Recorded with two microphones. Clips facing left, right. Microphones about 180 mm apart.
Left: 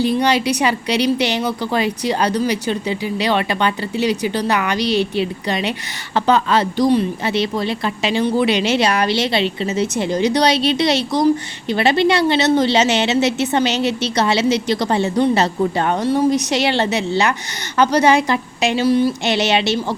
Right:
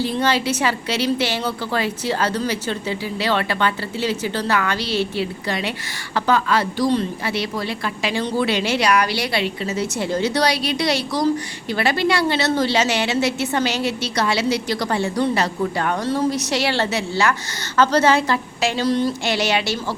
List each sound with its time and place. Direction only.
0.0 s a woman's voice: 15° left (ahead or behind)
18.9 s a woman's voice: 10° left (ahead or behind)
19.2 s a woman's voice: 20° left (ahead or behind)